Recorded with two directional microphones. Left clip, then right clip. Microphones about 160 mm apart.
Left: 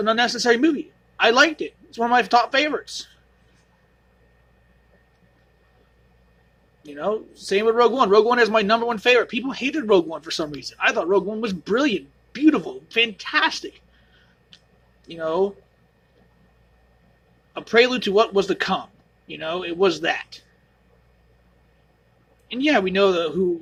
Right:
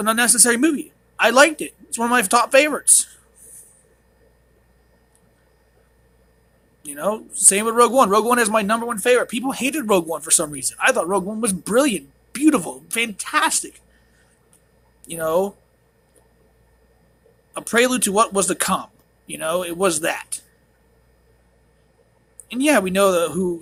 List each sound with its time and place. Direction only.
0.0 s speech: 25° right (ahead or behind)
6.9 s speech: 25° right (ahead or behind)
15.0 s speech: 25° right (ahead or behind)
17.5 s speech: 25° right (ahead or behind)
22.4 s speech: 25° right (ahead or behind)